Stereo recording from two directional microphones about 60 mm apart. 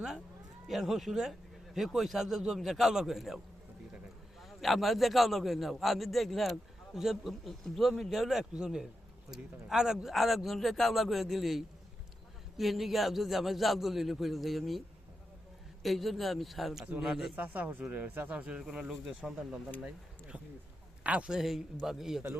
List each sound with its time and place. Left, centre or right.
0.7 s a man's voice: centre
15.8 s a man's voice: centre
17.3 s speech: right
18.7 s speech: centre
19.2 s a man's voice: centre
21.0 s speech: right
21.3 s a man's voice: centre